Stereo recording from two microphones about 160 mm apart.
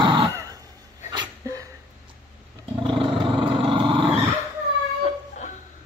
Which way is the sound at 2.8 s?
30° right (ahead or behind).